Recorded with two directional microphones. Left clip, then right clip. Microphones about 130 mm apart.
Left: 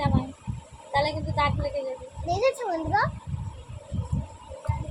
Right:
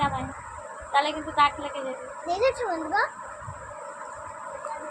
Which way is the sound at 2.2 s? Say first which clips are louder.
Even; 35° left (ahead or behind).